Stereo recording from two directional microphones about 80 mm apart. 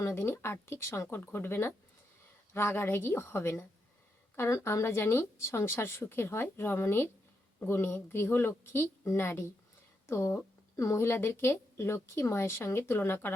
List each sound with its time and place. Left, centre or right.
0.0 s a woman's voice: left